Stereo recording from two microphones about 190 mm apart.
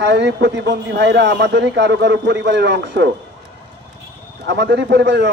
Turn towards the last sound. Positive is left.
turn(degrees=-60)  # may be behind; listen again after turning